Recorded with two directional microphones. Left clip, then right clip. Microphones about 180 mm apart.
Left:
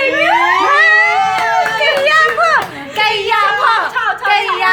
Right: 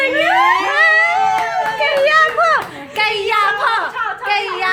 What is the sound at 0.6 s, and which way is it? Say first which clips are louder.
Cat: left 3 dB; centre (ahead or behind).